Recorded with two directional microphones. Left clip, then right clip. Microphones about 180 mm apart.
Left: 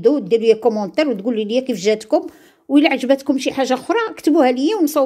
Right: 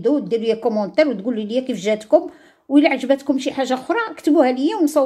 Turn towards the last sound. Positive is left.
turn(degrees=35)  # may be behind; listen again after turning